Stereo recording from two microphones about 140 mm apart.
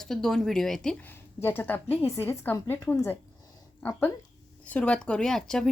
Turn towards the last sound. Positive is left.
turn(degrees=5)  # may be behind; listen again after turning